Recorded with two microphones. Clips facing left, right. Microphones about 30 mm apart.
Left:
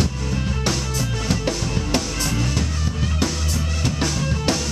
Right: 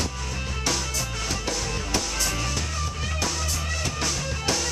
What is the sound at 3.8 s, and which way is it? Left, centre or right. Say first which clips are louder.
Music: left 7 dB; left.